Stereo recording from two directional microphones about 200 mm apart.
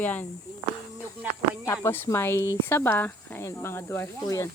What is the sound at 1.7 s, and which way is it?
Speech, 10° left (ahead or behind).